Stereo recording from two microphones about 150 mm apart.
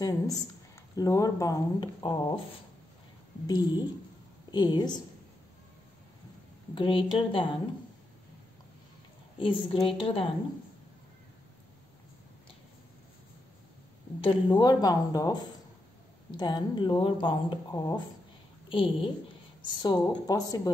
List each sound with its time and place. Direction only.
0.0 s speech: 25° left (ahead or behind)
3.4 s a woman's voice: 25° left (ahead or behind)
6.7 s speech: 35° left (ahead or behind)
9.4 s speech: 35° left (ahead or behind)
14.2 s speech: 30° left (ahead or behind)
16.3 s speech: 30° left (ahead or behind)